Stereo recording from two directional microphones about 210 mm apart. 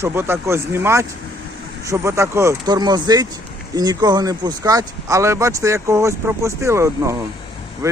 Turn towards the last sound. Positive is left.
turn(degrees=-15)  # may be behind; listen again after turning